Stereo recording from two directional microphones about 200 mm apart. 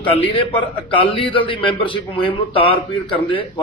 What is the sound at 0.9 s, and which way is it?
A man's voice, 25° left (ahead or behind).